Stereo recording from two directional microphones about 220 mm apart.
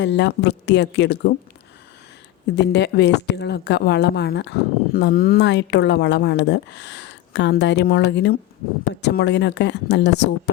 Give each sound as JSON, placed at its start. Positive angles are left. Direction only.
{"t": 0.0, "sound": "speech", "side_deg": 50}
{"t": 2.6, "sound": "speech", "side_deg": 50}